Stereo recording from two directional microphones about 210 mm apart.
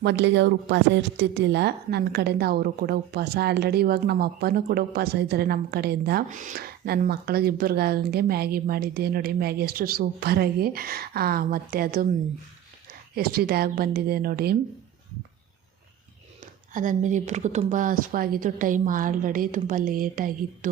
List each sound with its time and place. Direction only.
0.0 s speech: 55° right (ahead or behind)
13.1 s speech: 45° right (ahead or behind)
16.7 s speech: 35° right (ahead or behind)